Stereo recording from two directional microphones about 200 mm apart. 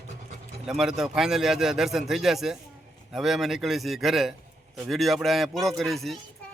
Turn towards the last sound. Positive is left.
turn(degrees=0)  # may be behind; listen again after turning